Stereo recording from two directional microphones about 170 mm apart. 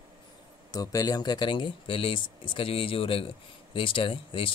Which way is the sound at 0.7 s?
20° left (ahead or behind).